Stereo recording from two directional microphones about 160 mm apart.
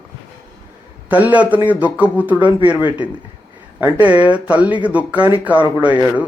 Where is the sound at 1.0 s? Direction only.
10° right (ahead or behind).